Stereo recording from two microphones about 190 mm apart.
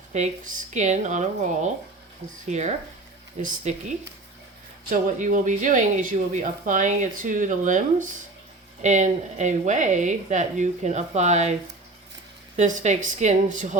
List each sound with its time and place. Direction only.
0.1 s speech: 40° right (ahead or behind)
12.5 s speech: 40° right (ahead or behind)